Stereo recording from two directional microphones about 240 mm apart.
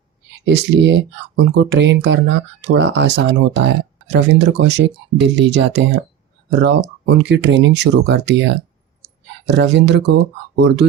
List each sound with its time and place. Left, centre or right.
0.4 s speech: right